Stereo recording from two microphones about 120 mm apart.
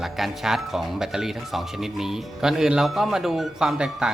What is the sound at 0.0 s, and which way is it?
Speech, centre (ahead or behind).